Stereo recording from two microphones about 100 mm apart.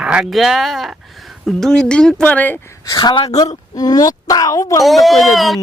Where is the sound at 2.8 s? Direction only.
45° left (ahead or behind).